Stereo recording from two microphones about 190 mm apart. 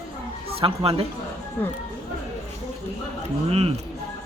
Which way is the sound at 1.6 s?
10° left (ahead or behind).